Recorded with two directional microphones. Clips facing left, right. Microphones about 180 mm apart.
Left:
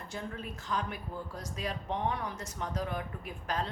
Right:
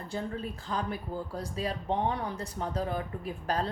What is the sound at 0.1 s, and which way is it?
A woman's voice, 30° right (ahead or behind).